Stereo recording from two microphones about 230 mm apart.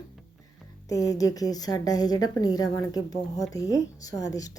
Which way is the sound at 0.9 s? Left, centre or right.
Centre.